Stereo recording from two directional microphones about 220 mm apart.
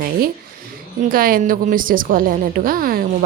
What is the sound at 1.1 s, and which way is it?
A woman's voice, 40° right (ahead or behind).